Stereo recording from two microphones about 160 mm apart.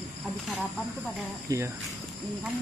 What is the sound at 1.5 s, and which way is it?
Cricket, 20° right (ahead or behind).